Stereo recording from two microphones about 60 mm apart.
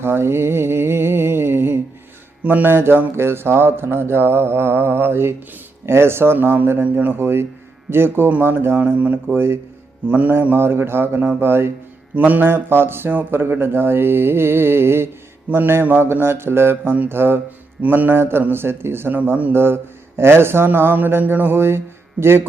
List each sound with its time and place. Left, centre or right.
0.0 s mantra: right
2.4 s a man's voice: right
6.8 s speech: right
7.2 s a man's voice: right
8.8 s speech: right
9.3 s a man's voice: right
10.1 s speech: right
10.5 s a man's voice: right
12.1 s a man's voice: right
19.1 s speech: right
19.5 s a man's voice: right